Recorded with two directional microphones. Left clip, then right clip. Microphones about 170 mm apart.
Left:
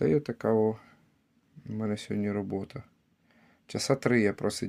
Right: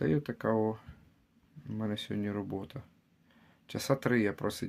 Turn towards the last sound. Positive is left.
turn(degrees=20)  # may be behind; listen again after turning